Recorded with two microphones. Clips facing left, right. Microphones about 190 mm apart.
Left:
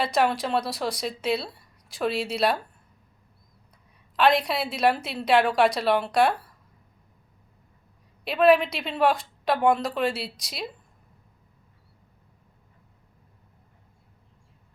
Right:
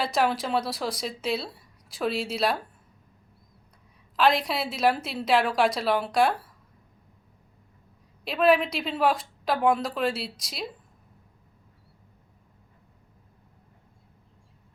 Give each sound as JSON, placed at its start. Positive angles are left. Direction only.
{"t": 0.0, "sound": "speech", "side_deg": 0}
{"t": 4.2, "sound": "speech", "side_deg": 0}
{"t": 8.2, "sound": "speech", "side_deg": 0}